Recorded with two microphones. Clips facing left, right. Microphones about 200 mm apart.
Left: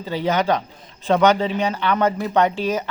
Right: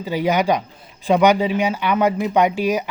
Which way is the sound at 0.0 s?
10° right (ahead or behind).